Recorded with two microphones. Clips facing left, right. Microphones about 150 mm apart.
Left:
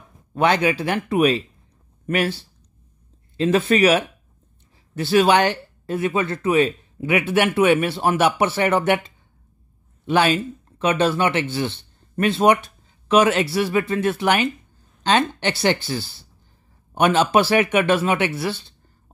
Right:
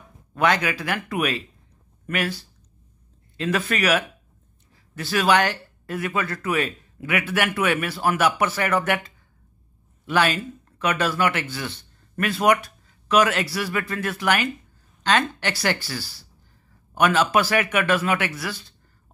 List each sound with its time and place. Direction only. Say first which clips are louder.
0.3 s speech: left 3 dB; 30° left (ahead or behind)
5.1 s speech: left 4 dB; 30° left (ahead or behind)